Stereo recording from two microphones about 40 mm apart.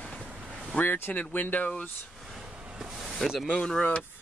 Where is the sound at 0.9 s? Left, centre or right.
Left.